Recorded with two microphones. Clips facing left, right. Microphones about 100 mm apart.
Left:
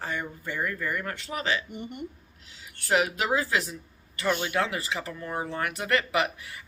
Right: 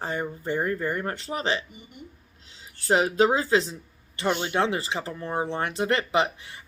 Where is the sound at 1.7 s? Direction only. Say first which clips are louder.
Left 9 dB; 65° left (ahead or behind).